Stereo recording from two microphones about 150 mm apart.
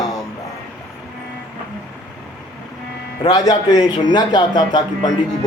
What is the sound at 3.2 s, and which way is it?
Speech, 25° left (ahead or behind).